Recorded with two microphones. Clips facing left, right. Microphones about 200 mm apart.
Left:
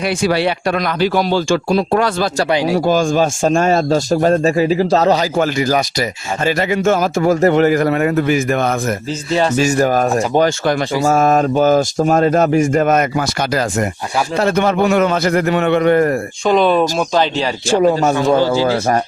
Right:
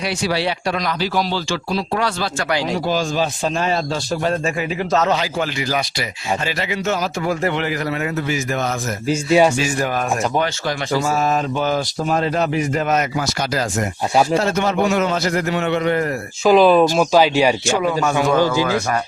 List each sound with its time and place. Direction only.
0.2 s speech: 55° left (ahead or behind)
9.0 s speech: 10° right (ahead or behind)
9.6 s speech: 45° left (ahead or behind)
14.4 s a man's voice: 60° left (ahead or behind)
16.5 s speech: centre (ahead or behind)
17.7 s speech: 35° left (ahead or behind)